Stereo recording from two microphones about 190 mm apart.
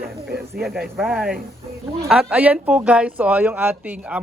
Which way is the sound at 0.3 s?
55° right (ahead or behind).